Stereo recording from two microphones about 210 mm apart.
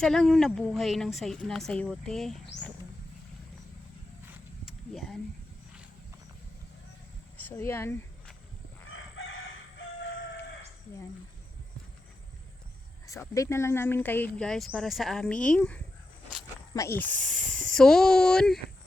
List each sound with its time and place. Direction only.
0.0 s speech: centre (ahead or behind)
7.3 s speech: 10° left (ahead or behind)
8.9 s chicken: 70° left (ahead or behind)
13.1 s speech: 15° left (ahead or behind)